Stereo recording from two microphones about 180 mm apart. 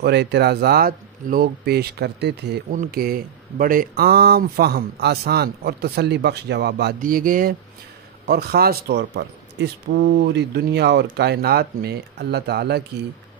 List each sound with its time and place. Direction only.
0.0 s speech: 70° right (ahead or behind)
2.7 s speech: 50° right (ahead or behind)